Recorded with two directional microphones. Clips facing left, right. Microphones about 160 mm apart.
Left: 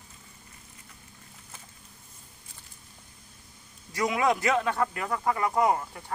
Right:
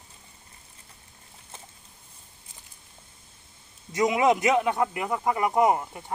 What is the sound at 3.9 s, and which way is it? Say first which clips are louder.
A man's voice: right 4 dB; 20° right (ahead or behind).